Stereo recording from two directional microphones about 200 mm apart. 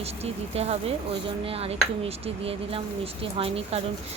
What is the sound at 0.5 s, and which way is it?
Speech, 30° right (ahead or behind).